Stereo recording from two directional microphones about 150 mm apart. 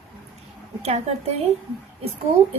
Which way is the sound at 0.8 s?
45° right (ahead or behind).